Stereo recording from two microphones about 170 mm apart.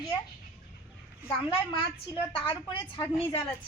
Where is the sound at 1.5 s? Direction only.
30° left (ahead or behind).